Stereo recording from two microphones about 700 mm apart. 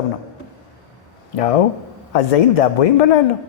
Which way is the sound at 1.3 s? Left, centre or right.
Left.